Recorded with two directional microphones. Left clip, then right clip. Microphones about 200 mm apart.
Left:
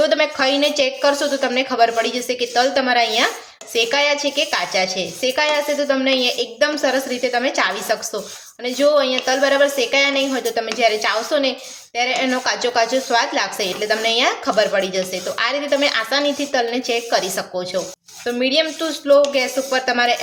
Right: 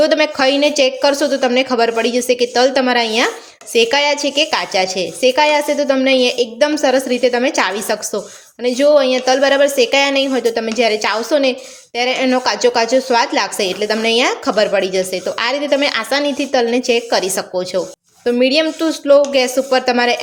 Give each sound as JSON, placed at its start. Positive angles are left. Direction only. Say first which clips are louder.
{"t": 0.0, "sound": "a woman's voice", "louder": "right 4 dB", "side_deg": -40}